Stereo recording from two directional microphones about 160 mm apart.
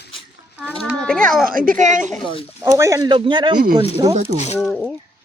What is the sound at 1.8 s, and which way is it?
Speech, 50° right (ahead or behind).